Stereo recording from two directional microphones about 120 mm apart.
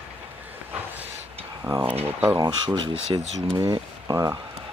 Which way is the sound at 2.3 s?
35° right (ahead or behind).